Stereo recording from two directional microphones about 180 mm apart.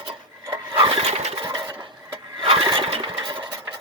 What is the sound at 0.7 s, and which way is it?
Lawn mower, 30° right (ahead or behind).